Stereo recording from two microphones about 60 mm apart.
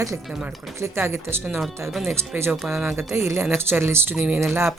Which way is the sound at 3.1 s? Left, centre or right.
Right.